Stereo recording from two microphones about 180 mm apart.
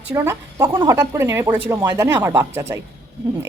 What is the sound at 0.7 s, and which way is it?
Speech, 25° right (ahead or behind).